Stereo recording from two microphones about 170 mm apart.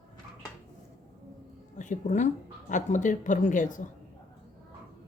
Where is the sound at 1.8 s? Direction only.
45° left (ahead or behind).